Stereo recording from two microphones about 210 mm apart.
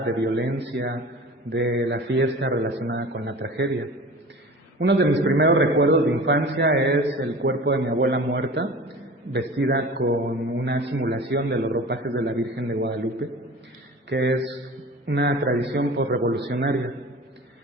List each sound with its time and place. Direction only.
0.0 s a man's voice: 55° right (ahead or behind)
4.8 s a man's voice: 55° right (ahead or behind)